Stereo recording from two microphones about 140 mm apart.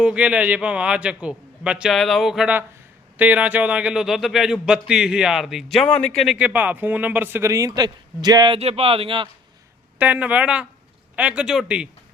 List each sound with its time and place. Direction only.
0.0 s a man's voice: 10° right (ahead or behind)
6.3 s a man's voice: 10° right (ahead or behind); by 8.5 s 30° right (ahead or behind)
8.5 s speech: 45° right (ahead or behind)
10.0 s a man's voice: 10° right (ahead or behind)